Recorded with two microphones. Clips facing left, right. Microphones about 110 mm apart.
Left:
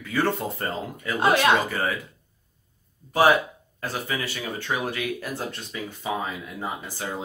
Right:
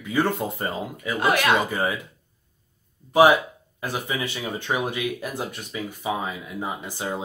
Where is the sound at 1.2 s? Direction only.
25° left (ahead or behind).